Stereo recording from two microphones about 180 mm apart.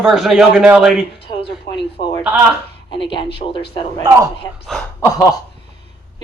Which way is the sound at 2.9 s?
25° left (ahead or behind).